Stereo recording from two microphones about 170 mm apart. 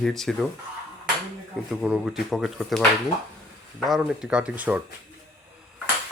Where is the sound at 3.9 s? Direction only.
5° right (ahead or behind).